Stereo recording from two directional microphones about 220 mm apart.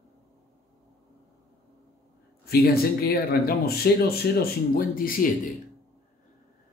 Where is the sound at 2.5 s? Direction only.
45° left (ahead or behind).